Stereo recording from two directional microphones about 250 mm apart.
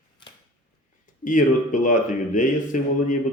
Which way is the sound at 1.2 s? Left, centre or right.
Left.